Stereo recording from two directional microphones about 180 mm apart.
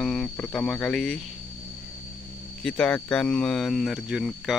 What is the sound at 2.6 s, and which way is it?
Speech, 5° left (ahead or behind).